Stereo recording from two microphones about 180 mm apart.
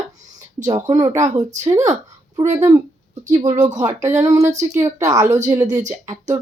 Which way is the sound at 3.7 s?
20° right (ahead or behind).